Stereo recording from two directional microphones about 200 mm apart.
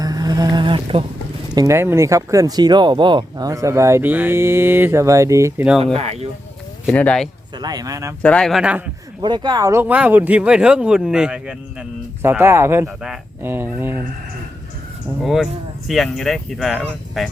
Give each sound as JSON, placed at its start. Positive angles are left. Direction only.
{"t": 0.0, "sound": "a sound", "side_deg": -20}
{"t": 1.5, "sound": "speech", "side_deg": -15}
{"t": 5.8, "sound": "speech", "side_deg": -30}
{"t": 6.8, "sound": "speech", "side_deg": 5}
{"t": 7.6, "sound": "speech", "side_deg": -20}
{"t": 8.2, "sound": "speech", "side_deg": 5}
{"t": 9.2, "sound": "speech", "side_deg": -20}
{"t": 15.2, "sound": "speech", "side_deg": 0}